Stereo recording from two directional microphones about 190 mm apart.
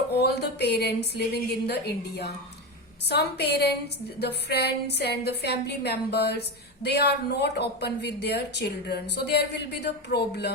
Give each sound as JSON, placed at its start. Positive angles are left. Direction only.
{"t": 0.2, "sound": "speech", "side_deg": 60}